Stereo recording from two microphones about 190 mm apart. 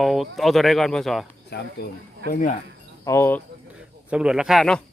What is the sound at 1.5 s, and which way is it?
Speech, 60° left (ahead or behind).